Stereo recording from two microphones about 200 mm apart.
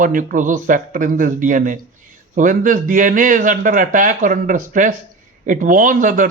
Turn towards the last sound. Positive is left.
turn(degrees=-40)  # may be behind; listen again after turning